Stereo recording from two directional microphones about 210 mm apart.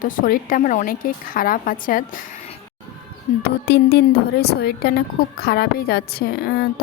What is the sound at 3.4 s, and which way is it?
A woman's voice, 50° left (ahead or behind).